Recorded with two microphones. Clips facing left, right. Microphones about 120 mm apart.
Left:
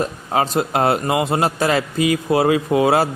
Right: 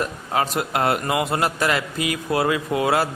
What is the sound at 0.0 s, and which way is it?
A man's voice, 30° left (ahead or behind).